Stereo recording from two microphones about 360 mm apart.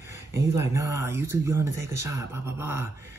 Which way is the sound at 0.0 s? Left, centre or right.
Centre.